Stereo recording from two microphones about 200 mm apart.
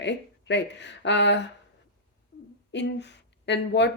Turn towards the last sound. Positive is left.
turn(degrees=60)  # may be behind; listen again after turning